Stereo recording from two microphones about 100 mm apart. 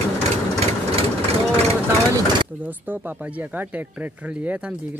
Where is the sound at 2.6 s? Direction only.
20° right (ahead or behind).